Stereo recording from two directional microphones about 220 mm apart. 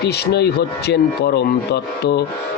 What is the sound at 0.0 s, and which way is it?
A man's voice, 50° left (ahead or behind).